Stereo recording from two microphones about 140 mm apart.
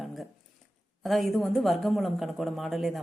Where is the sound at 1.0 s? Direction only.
Centre (ahead or behind).